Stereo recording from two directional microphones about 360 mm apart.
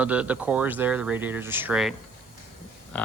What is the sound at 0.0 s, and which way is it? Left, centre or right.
Speech, centre.